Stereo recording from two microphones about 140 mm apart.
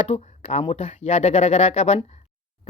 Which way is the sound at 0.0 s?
45° left (ahead or behind).